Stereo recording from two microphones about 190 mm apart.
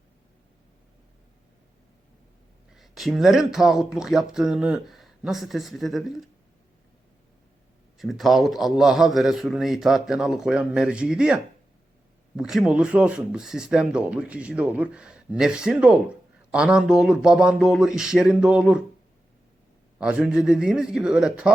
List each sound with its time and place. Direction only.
2.7 s speech: centre (ahead or behind)
7.9 s speech: centre (ahead or behind)
12.4 s speech: centre (ahead or behind)
20.0 s speech: 5° right (ahead or behind)